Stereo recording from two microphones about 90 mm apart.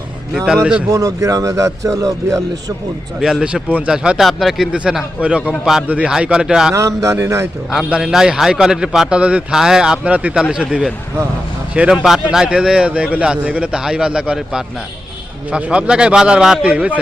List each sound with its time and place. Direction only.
0.3 s speech: 5° right (ahead or behind)
0.9 s a man's voice: 40° right (ahead or behind)
3.2 s a man's voice: 5° right (ahead or behind)
6.7 s a man's voice: 35° right (ahead or behind)
7.7 s a man's voice: 5° right (ahead or behind)
10.7 s a man's voice: 5° right (ahead or behind)